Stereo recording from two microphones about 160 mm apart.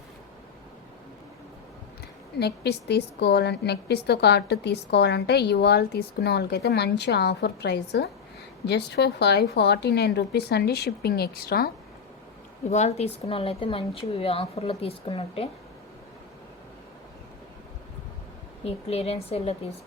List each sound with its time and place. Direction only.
2.4 s a woman's voice: 90° left; by 11.7 s 75° left (ahead or behind)
12.7 s a woman's voice: 45° left (ahead or behind)
18.6 s a woman's voice: 40° left (ahead or behind)